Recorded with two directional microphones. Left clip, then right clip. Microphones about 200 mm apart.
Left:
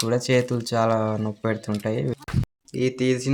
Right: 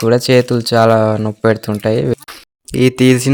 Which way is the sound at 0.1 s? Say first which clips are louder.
Right 11 dB; 45° right (ahead or behind).